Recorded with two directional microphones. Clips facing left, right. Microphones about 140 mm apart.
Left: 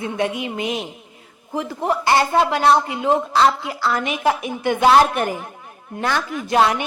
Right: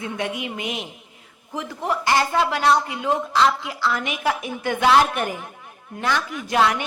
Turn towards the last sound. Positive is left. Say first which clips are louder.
# left 3 dB
turn(degrees=30)  # may be behind; listen again after turning